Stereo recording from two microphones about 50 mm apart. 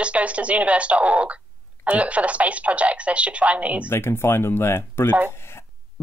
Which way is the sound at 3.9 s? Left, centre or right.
Left.